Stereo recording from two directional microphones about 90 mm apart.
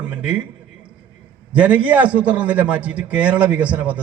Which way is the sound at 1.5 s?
15° right (ahead or behind).